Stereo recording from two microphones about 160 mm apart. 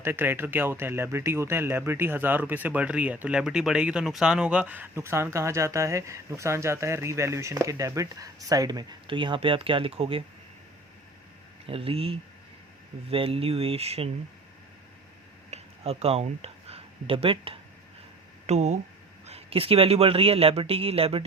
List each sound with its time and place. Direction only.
0.0 s speech: 15° right (ahead or behind); by 10.2 s 35° right (ahead or behind)
11.6 s a man's voice: 35° right (ahead or behind)
15.4 s a sound: 40° right (ahead or behind)
18.4 s a man's voice: 45° right (ahead or behind)